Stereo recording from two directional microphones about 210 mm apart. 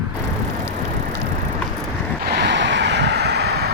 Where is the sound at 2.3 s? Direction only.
55° right (ahead or behind).